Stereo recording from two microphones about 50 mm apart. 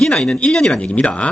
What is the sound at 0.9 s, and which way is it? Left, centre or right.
Speech, left.